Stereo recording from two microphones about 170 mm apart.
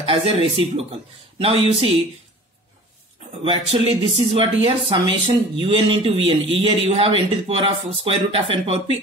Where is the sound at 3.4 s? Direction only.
35° right (ahead or behind).